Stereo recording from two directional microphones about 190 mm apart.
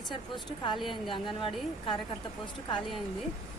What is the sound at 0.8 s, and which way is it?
A woman's voice, 25° left (ahead or behind).